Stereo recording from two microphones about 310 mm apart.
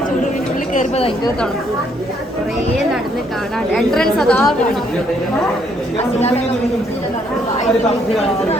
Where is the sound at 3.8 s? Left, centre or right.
Centre.